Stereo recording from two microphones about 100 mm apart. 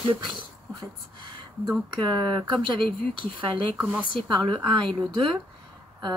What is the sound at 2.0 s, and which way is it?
A woman's voice, 55° right (ahead or behind).